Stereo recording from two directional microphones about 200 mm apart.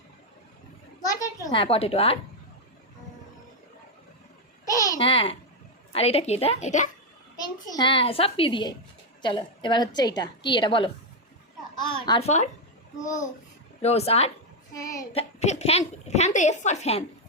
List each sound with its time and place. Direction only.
1.0 s a child's voice: 15° left (ahead or behind)
4.6 s babbling: 15° left (ahead or behind)
5.9 s a child's voice: 30° left (ahead or behind)
7.4 s a woman's voice: 20° left (ahead or behind)
13.8 s a child's voice: 30° left (ahead or behind)
14.7 s child singing: 15° left (ahead or behind)
15.1 s a child's voice: 35° left (ahead or behind)